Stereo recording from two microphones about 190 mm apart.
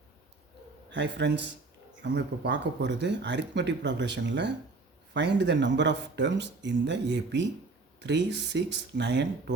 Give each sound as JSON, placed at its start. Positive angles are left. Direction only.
{"t": 0.9, "sound": "a man's voice", "side_deg": -65}